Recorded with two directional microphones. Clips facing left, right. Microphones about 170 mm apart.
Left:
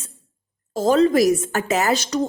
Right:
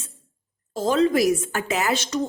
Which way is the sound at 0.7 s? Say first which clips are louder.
Left 4 dB; 40° left (ahead or behind).